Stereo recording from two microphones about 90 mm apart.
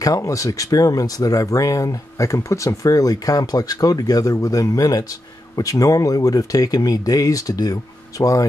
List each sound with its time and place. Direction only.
0.0 s speech: 40° left (ahead or behind)